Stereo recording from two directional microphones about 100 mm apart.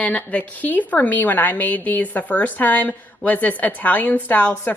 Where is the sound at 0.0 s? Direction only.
15° left (ahead or behind).